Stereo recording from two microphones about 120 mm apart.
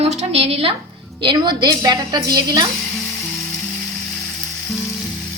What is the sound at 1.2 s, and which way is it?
A woman's voice, 40° right (ahead or behind).